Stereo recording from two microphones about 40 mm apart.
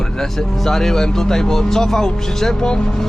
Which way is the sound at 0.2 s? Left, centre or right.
Centre.